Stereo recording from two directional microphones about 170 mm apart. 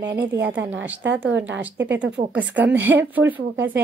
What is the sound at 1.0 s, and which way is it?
Speech, 90° right.